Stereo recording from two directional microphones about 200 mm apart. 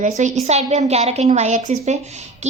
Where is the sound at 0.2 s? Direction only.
35° right (ahead or behind).